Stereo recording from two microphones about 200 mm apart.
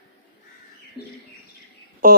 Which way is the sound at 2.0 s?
45° right (ahead or behind).